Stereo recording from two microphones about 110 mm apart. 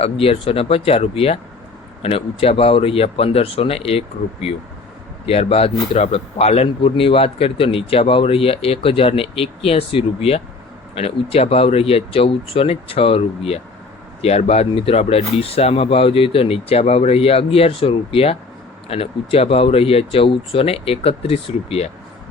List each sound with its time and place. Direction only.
0.0 s speech: 60° left (ahead or behind)
14.2 s speech: 70° left (ahead or behind)